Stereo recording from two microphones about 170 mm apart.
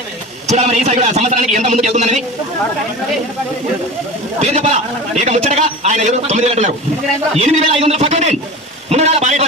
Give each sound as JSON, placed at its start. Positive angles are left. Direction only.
{"t": 0.5, "sound": "a man's voice", "side_deg": -40}
{"t": 4.4, "sound": "a man's voice", "side_deg": -40}